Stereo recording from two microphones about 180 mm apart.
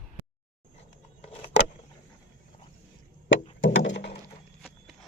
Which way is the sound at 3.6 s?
90° left.